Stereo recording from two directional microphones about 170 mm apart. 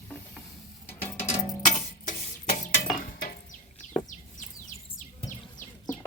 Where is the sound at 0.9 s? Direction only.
15° left (ahead or behind).